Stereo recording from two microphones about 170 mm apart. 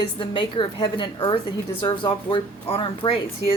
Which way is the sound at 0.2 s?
30° left (ahead or behind).